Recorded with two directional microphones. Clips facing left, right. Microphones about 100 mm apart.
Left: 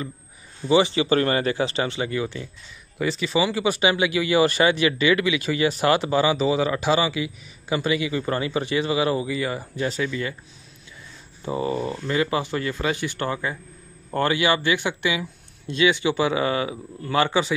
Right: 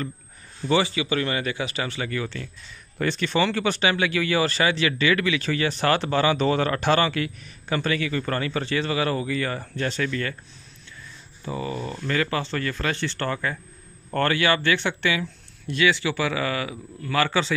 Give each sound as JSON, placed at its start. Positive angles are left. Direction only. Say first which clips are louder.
{"t": 0.7, "sound": "a man's voice", "louder": "left 3 dB", "side_deg": 20}
{"t": 1.0, "sound": "a man's voice", "louder": "left 5 dB", "side_deg": 40}
{"t": 3.0, "sound": "speech", "louder": "left 1 dB", "side_deg": 5}
{"t": 11.4, "sound": "a man's voice", "louder": "left 5 dB", "side_deg": 25}
{"t": 11.9, "sound": "a man's voice", "louder": "left 2 dB", "side_deg": 15}